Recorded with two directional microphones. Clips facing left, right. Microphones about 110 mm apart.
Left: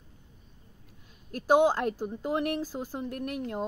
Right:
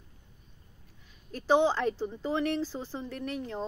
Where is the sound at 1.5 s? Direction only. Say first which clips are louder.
Left 2 dB; 10° left (ahead or behind).